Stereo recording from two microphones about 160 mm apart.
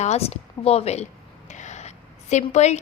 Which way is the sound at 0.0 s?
40° left (ahead or behind).